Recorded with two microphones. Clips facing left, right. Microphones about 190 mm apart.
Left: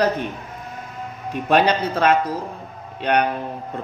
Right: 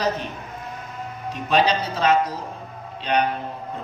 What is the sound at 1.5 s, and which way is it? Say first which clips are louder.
A man's voice: left 3 dB; 55° left (ahead or behind).